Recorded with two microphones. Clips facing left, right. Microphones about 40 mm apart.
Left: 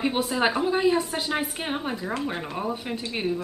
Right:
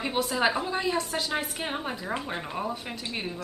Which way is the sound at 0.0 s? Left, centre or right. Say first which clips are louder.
Left 2 dB; centre.